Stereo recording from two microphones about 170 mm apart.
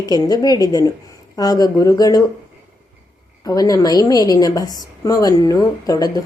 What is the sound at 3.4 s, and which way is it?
A woman's voice, 20° left (ahead or behind).